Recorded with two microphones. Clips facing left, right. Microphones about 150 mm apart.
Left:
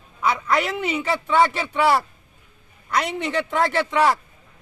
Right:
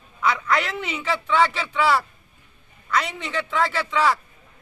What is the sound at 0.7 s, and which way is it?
Speech, 50° left (ahead or behind).